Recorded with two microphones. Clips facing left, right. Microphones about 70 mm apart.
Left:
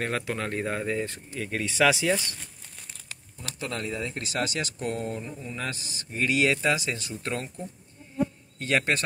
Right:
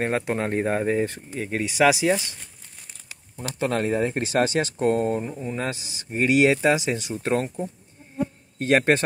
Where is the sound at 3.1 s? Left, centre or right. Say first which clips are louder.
Right 8 dB; right.